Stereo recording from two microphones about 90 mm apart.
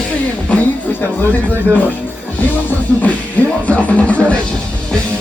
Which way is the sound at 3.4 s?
15° left (ahead or behind).